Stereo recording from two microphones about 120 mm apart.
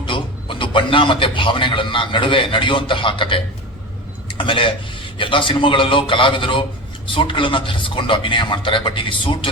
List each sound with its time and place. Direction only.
0.0 s a man's voice: 45° left (ahead or behind)